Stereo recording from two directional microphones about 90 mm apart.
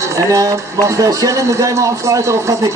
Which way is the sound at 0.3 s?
40° right (ahead or behind).